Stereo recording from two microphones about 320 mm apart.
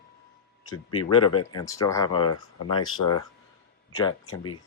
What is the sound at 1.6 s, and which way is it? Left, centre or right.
Speech, centre.